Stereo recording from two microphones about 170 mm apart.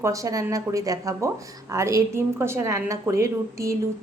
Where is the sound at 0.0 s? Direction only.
20° right (ahead or behind).